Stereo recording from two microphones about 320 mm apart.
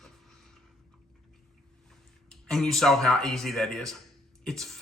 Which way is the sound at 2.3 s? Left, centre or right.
Centre.